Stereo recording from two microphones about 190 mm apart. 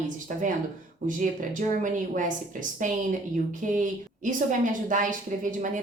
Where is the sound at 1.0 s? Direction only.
45° right (ahead or behind).